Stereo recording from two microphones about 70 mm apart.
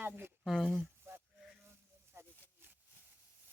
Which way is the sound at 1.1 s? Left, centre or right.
Right.